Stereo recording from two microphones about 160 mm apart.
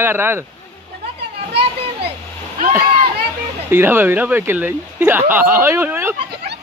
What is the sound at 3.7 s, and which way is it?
Speech, 15° right (ahead or behind).